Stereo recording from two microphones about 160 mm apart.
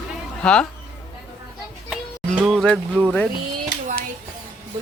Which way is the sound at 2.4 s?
Centre (ahead or behind).